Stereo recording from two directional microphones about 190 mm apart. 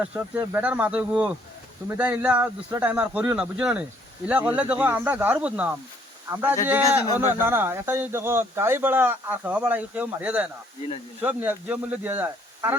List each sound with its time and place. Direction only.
0.0 s speech: 10° right (ahead or behind)